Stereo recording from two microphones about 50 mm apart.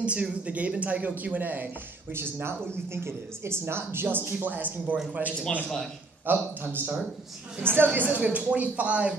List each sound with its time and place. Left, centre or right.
0.0 s speech: right
2.4 s a woman's voice: right
8.2 s speech: right